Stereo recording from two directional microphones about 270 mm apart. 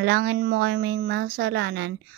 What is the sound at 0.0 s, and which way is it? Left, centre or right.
Speech, right.